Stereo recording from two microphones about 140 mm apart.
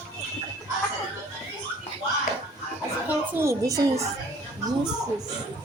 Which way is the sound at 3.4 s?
25° right (ahead or behind).